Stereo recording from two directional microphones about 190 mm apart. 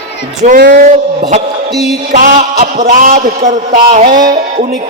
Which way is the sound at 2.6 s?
35° right (ahead or behind).